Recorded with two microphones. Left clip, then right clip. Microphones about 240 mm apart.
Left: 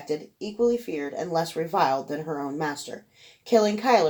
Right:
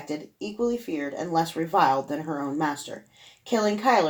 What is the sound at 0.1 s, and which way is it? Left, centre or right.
Speech, left.